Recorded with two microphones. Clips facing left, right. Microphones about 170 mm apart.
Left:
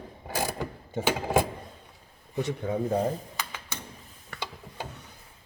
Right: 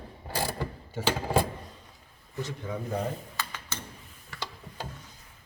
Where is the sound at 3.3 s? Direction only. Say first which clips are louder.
Even; 15° left (ahead or behind).